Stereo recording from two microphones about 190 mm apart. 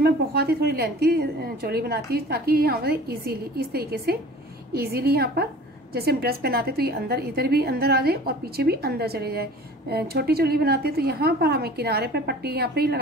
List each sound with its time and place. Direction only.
0.0 s a woman's voice: 55° right (ahead or behind)